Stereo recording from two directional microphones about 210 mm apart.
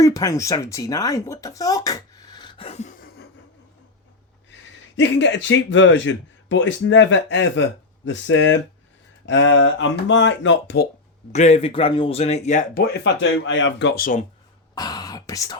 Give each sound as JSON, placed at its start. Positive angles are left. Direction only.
{"t": 0.0, "sound": "speech", "side_deg": 15}
{"t": 4.5, "sound": "speech", "side_deg": 60}
{"t": 11.3, "sound": "speech", "side_deg": 30}
{"t": 13.4, "sound": "speech", "side_deg": 60}
{"t": 14.8, "sound": "speech", "side_deg": 20}